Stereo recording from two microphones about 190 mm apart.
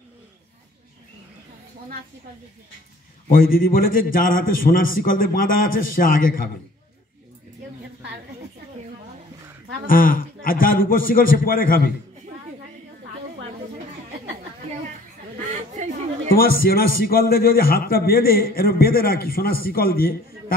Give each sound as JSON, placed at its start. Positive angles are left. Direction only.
{"t": 3.3, "sound": "a man's voice", "side_deg": 50}
{"t": 9.8, "sound": "a man's voice", "side_deg": 45}
{"t": 16.3, "sound": "a man's voice", "side_deg": 50}